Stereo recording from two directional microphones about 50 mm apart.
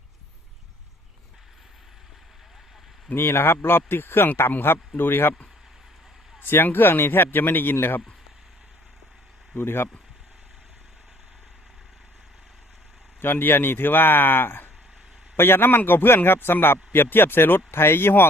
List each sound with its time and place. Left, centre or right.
3.2 s speech: left
6.4 s speech: left
9.6 s speech: left
13.2 s speech: left